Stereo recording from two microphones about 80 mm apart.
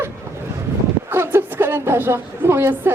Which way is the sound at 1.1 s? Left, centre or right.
Right.